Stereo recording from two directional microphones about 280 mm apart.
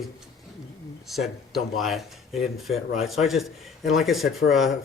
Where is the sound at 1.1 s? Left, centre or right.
Centre.